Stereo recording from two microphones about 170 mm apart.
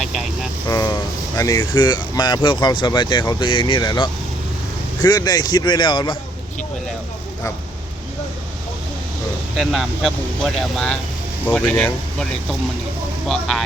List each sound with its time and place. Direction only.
0.0 s vehicle: 5° right (ahead or behind)
0.7 s vehicle: 20° left (ahead or behind)
1.4 s speech: 20° left (ahead or behind)
9.6 s speech: centre (ahead or behind)
13.2 s speech: 5° left (ahead or behind)